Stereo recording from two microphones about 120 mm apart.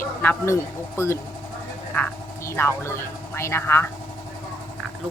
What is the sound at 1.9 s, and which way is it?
Speech, 10° left (ahead or behind).